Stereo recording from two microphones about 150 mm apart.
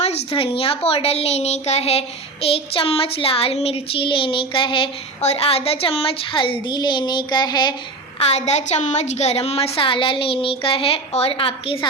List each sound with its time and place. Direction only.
0.0 s a woman's voice: 45° left (ahead or behind)
0.9 s child singing: 40° left (ahead or behind)
8.2 s child singing: 45° left (ahead or behind)